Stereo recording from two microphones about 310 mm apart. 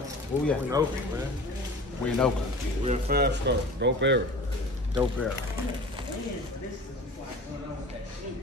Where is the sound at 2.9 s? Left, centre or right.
Right.